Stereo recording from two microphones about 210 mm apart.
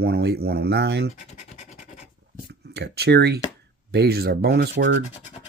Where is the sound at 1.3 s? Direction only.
35° left (ahead or behind).